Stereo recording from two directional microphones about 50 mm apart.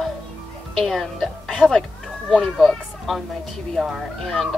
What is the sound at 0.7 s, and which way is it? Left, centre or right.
A woman's voice, centre.